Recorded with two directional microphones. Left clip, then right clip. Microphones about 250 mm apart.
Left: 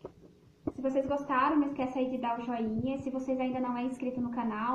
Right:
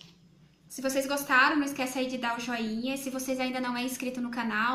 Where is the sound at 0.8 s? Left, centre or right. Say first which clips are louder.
Right 2 dB; right.